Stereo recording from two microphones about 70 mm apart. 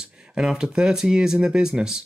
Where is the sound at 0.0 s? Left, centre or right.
Centre.